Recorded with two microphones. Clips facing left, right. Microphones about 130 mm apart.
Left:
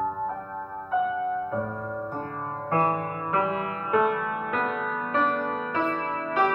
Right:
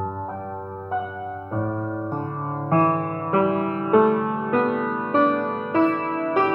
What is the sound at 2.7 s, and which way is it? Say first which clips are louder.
Music: right 5 dB; 40° right (ahead or behind).